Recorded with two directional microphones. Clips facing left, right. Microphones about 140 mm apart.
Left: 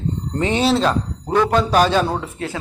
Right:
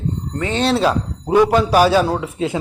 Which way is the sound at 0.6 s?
5° right (ahead or behind).